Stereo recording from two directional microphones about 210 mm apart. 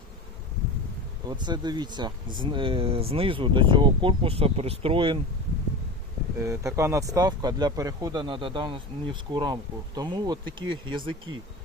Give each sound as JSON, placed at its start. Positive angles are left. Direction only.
{"t": 1.3, "sound": "speech", "side_deg": -20}
{"t": 6.4, "sound": "speech", "side_deg": -15}